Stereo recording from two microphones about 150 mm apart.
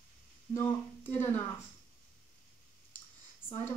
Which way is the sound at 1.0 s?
15° left (ahead or behind).